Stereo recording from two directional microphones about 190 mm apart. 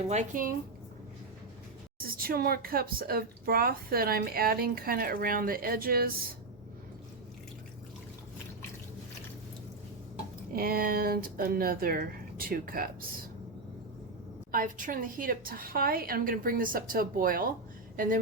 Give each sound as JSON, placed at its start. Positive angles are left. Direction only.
{"t": 0.1, "sound": "speech", "side_deg": -40}
{"t": 2.0, "sound": "speech", "side_deg": -50}
{"t": 10.5, "sound": "speech", "side_deg": -50}
{"t": 14.5, "sound": "a woman's voice", "side_deg": -45}